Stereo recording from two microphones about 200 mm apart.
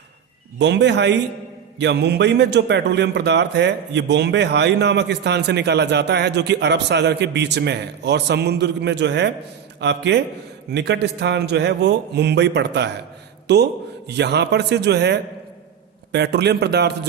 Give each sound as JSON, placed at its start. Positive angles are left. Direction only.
{"t": 0.6, "sound": "a man's voice", "side_deg": -60}